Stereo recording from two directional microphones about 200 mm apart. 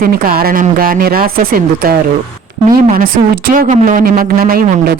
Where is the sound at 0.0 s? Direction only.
45° right (ahead or behind).